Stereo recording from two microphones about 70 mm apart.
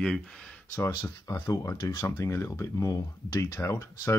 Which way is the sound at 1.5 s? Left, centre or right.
Left.